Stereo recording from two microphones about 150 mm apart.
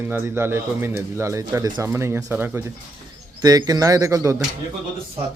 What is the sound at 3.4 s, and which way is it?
Speech, 25° right (ahead or behind).